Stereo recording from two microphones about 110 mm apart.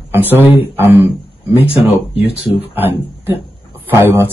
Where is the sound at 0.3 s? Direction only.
20° right (ahead or behind).